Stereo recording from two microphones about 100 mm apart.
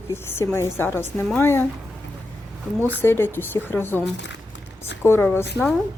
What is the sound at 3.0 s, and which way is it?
Speech, 25° left (ahead or behind).